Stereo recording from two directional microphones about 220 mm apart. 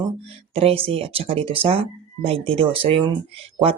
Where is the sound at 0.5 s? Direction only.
25° right (ahead or behind).